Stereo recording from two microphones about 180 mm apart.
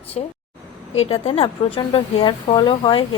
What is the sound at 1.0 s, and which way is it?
A woman's voice, 30° left (ahead or behind).